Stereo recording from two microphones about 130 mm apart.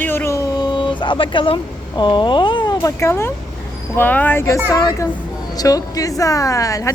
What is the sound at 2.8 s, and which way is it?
A woman's voice, 20° left (ahead or behind).